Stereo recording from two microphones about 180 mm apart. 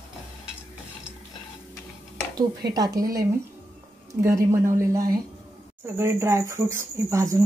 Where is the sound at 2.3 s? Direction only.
20° right (ahead or behind).